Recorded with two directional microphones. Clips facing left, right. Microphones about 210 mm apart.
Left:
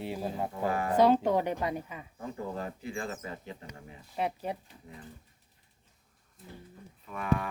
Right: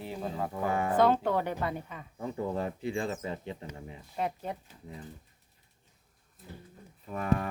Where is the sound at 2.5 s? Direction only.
25° right (ahead or behind).